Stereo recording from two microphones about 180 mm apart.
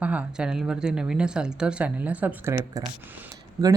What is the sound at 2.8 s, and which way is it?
Speech, 20° right (ahead or behind).